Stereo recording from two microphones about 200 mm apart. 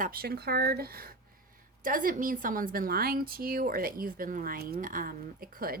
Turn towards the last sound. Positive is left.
turn(degrees=-45)  # may be behind; listen again after turning